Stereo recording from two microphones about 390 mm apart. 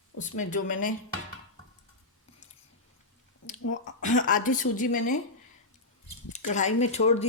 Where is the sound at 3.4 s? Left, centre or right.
Left.